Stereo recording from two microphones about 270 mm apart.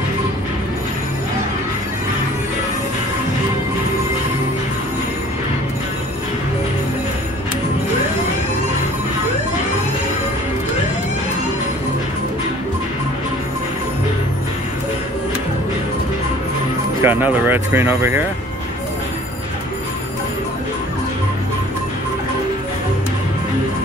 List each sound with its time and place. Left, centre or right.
17.0 s speech: centre